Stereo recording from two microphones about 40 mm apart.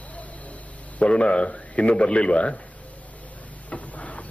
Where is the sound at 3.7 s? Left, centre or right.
Left.